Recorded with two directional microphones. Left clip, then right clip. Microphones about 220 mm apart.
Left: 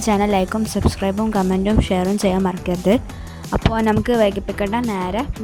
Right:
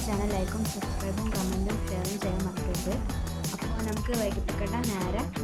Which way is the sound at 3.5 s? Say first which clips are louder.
Left 19 dB; 50° left (ahead or behind).